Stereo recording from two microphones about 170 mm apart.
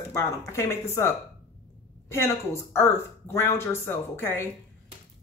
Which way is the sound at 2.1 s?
15° left (ahead or behind).